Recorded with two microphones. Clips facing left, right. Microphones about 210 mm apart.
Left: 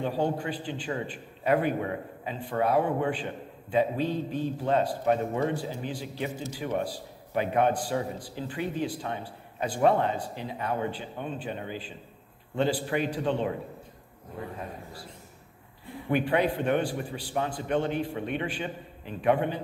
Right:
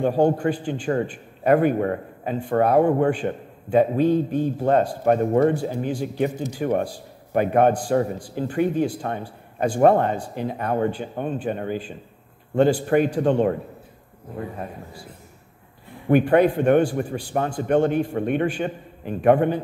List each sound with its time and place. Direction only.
0.0 s a man's voice: 50° right (ahead or behind)
16.1 s a man's voice: 50° right (ahead or behind)